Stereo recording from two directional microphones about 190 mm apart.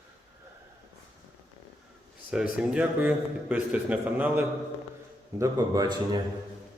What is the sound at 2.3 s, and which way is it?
A man's voice, 5° right (ahead or behind).